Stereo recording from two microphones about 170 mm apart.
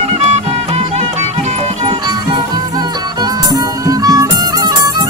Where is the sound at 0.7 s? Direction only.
40° right (ahead or behind).